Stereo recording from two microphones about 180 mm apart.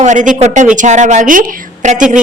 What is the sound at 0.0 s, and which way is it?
A woman's voice, 45° right (ahead or behind).